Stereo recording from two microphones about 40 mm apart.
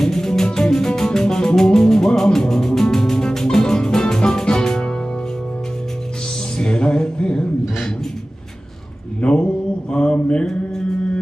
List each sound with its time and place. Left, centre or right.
0.0 s music: centre
6.6 s a sound: left
9.2 s mantra: left